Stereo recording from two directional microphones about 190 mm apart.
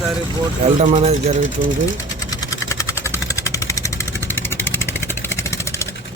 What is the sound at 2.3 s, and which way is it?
Vehicle, 20° left (ahead or behind).